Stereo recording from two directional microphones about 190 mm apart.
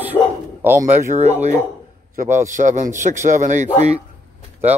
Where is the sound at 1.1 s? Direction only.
35° right (ahead or behind).